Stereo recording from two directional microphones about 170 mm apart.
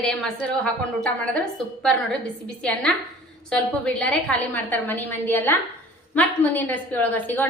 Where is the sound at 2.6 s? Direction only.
5° left (ahead or behind).